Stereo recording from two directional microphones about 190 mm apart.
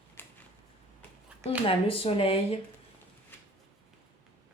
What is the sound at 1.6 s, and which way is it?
Speech, 30° left (ahead or behind).